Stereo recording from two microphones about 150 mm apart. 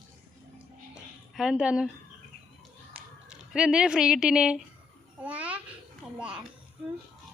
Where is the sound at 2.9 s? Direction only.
5° right (ahead or behind).